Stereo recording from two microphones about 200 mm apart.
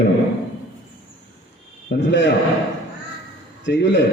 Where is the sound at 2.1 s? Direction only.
60° left (ahead or behind).